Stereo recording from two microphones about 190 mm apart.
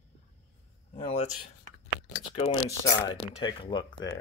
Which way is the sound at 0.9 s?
35° left (ahead or behind).